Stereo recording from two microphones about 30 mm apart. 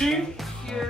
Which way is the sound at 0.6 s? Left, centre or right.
Centre.